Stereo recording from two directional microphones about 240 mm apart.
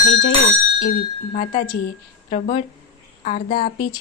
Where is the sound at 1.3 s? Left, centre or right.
Left.